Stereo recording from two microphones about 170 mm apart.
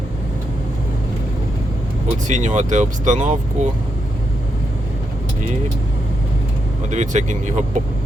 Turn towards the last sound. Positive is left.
turn(degrees=-45)  # may be behind; listen again after turning